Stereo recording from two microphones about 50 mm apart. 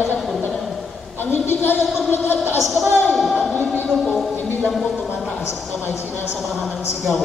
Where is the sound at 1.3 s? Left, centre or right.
Left.